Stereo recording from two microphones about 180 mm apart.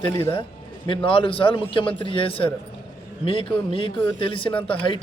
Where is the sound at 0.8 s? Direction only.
30° left (ahead or behind).